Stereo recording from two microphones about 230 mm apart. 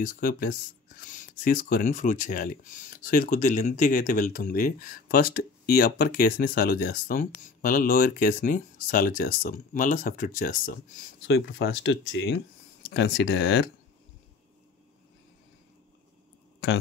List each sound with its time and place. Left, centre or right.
0.0 s speech: left
11.2 s speech: left